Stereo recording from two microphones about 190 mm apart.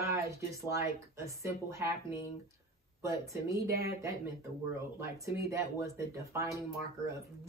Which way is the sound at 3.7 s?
55° right (ahead or behind).